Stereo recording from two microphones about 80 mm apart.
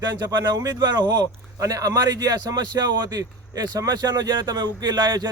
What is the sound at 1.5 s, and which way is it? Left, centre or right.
A man's voice, right.